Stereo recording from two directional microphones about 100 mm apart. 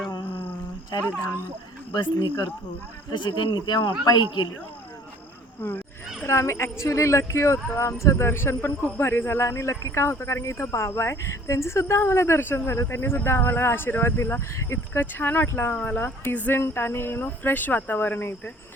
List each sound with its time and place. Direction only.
1.9 s a man's voice: 45° left (ahead or behind)
5.6 s speech: 20° left (ahead or behind)